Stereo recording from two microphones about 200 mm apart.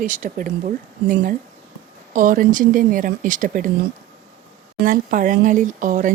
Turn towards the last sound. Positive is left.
turn(degrees=-40)  # may be behind; listen again after turning